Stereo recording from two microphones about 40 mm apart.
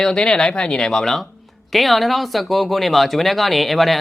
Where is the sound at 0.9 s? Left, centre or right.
Centre.